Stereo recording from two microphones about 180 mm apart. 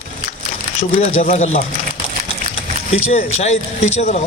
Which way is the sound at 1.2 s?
35° left (ahead or behind).